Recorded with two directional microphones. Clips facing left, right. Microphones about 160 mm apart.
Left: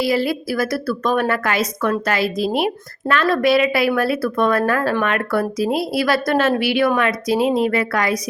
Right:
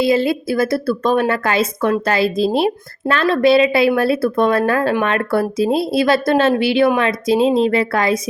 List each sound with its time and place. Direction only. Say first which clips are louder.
0.0 s a woman's voice: right 4 dB; 25° right (ahead or behind)